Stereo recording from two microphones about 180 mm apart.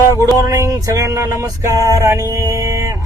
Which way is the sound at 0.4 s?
20° right (ahead or behind).